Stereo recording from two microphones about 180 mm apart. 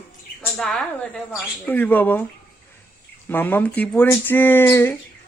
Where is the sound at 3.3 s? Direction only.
10° left (ahead or behind).